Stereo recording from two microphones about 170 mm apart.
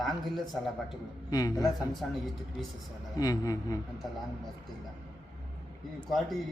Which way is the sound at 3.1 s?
20° left (ahead or behind).